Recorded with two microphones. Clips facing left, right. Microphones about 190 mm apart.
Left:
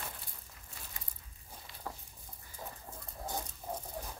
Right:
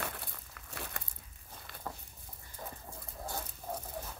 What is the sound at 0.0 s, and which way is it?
Crumpling, 70° right (ahead or behind).